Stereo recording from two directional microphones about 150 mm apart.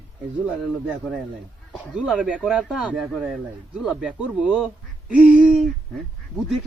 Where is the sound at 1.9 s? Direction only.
5° right (ahead or behind).